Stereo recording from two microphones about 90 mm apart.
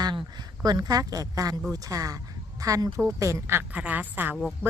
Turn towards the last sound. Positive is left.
turn(degrees=-20)  # may be behind; listen again after turning